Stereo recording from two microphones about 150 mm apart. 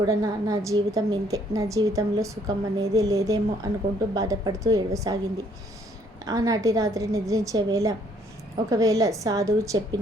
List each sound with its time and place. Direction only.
0.0 s a woman's voice: 20° right (ahead or behind)
6.2 s a woman's voice: 25° right (ahead or behind)